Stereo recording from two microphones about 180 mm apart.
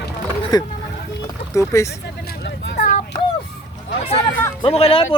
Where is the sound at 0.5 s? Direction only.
25° left (ahead or behind).